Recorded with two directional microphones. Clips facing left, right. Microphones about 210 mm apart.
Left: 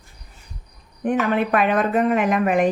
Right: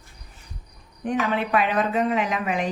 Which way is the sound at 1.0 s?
55° left (ahead or behind).